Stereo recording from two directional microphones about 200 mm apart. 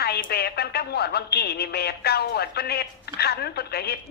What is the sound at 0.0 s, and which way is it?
A woman's voice, 50° left (ahead or behind).